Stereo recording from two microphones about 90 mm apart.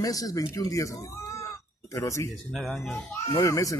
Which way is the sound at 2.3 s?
5° left (ahead or behind).